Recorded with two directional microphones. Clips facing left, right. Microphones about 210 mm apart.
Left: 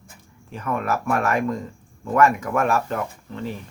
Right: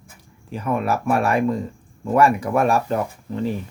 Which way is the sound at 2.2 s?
30° right (ahead or behind).